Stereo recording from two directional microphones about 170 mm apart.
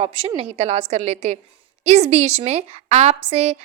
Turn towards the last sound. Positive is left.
turn(degrees=-40)  # may be behind; listen again after turning